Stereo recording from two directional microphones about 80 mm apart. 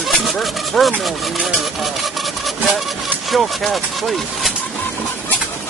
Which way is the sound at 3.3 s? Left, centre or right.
Centre.